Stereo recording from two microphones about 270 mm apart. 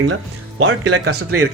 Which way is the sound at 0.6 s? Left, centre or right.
Right.